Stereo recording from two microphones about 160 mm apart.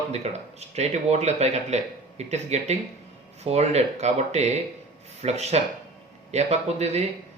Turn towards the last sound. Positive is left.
turn(degrees=-40)  # may be behind; listen again after turning